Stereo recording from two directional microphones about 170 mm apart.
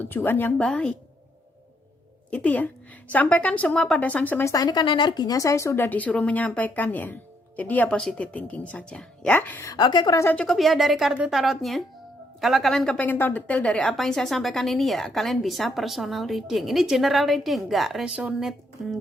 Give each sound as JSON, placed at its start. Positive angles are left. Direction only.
{"t": 0.0, "sound": "speech", "side_deg": 10}
{"t": 2.3, "sound": "speech", "side_deg": 10}
{"t": 9.7, "sound": "a woman's voice", "side_deg": 25}
{"t": 10.3, "sound": "a woman's voice", "side_deg": 0}